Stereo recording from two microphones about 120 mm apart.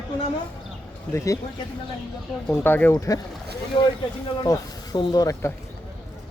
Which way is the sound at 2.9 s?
30° left (ahead or behind).